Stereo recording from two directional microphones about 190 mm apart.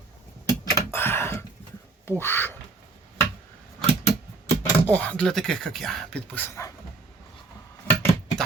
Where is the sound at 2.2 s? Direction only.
10° left (ahead or behind).